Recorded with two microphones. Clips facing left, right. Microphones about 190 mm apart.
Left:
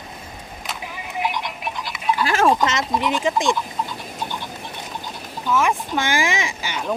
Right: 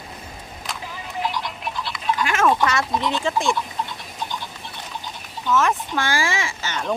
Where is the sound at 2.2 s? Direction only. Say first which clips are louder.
Left 2 dB; 35° left (ahead or behind).